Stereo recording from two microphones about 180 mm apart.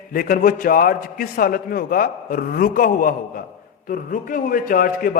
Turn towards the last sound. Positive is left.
turn(degrees=50)  # may be behind; listen again after turning